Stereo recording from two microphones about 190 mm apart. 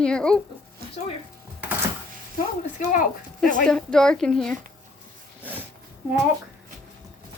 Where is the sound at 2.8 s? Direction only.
45° left (ahead or behind).